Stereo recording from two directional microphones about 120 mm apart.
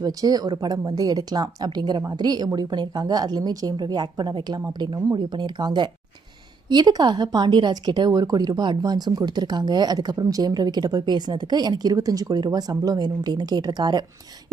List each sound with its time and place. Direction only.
0.0 s a woman's voice: 30° right (ahead or behind)